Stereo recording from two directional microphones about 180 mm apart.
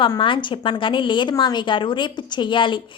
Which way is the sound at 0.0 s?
25° left (ahead or behind).